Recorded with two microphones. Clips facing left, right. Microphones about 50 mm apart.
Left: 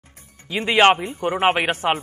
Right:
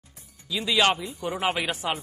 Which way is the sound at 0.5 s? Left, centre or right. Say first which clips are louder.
Left 7 dB; left.